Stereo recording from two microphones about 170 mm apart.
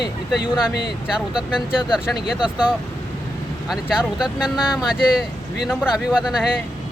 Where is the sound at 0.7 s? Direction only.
75° left (ahead or behind).